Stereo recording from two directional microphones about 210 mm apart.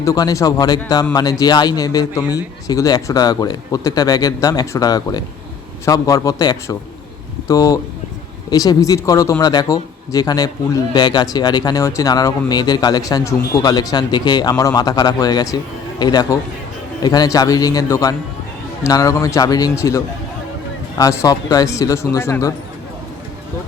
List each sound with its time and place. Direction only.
0.0 s speech: 15° left (ahead or behind)
21.0 s speech: 15° left (ahead or behind)